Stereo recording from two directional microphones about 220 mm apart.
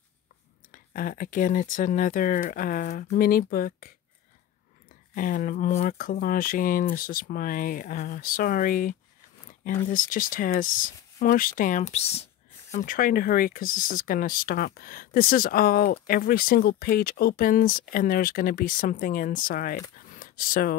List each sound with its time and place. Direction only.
0.7 s speech: 40° left (ahead or behind)
5.1 s speech: 40° left (ahead or behind)
12.7 s speech: 40° left (ahead or behind)
20.1 s a sound: 40° left (ahead or behind)